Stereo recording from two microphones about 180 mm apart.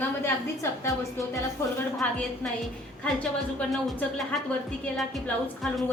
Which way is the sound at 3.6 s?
Centre (ahead or behind).